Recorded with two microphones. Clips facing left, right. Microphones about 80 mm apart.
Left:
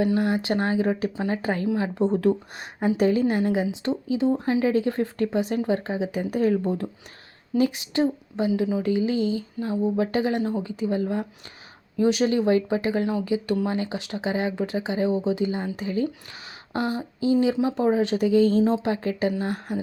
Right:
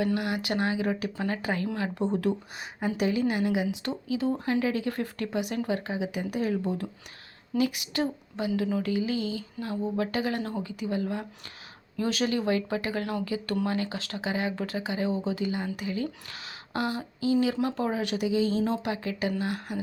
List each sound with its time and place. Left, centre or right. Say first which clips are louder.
0.0 s speech: left 5 dB; left
1.1 s speech: left 4 dB; centre
1.4 s speech: left 5 dB; left
16.7 s a sound: left 4 dB; left
17.4 s speech: left 5 dB; centre
18.3 s speech: left 7 dB; left
18.6 s speech: left 6 dB; left